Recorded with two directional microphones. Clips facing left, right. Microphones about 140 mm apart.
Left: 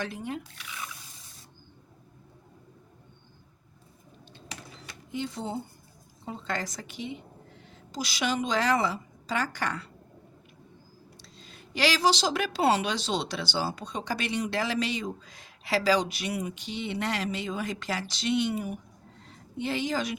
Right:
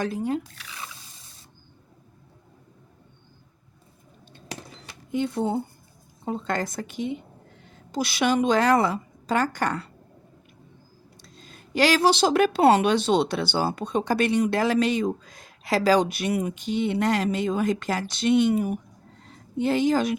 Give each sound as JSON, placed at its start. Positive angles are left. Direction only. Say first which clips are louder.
{"t": 0.0, "sound": "speech", "louder": "right 8 dB", "side_deg": -40}
{"t": 5.1, "sound": "a woman's voice", "louder": "right 8 dB", "side_deg": -55}
{"t": 11.2, "sound": "a woman's voice", "louder": "right 2 dB", "side_deg": -45}